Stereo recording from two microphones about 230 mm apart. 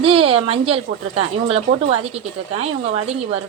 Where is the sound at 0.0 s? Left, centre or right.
Right.